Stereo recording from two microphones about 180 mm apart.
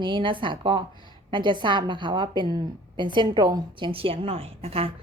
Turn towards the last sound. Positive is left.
turn(degrees=-30)  # may be behind; listen again after turning